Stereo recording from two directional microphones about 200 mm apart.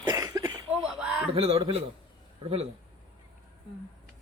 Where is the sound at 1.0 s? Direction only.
5° right (ahead or behind).